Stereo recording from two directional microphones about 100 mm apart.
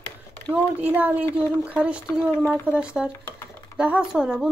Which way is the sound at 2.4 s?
20° left (ahead or behind).